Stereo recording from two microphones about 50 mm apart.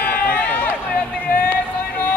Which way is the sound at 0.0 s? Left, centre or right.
Left.